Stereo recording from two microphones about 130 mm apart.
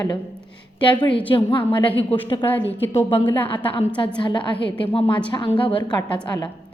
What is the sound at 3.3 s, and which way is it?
Speech, 15° left (ahead or behind).